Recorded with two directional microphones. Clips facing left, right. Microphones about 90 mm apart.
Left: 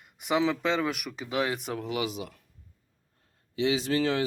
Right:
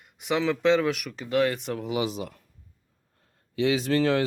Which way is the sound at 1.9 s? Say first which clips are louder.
Right 4 dB; 30° right (ahead or behind).